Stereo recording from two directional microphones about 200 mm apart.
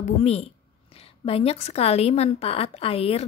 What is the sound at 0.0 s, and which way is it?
A woman's voice, 30° left (ahead or behind).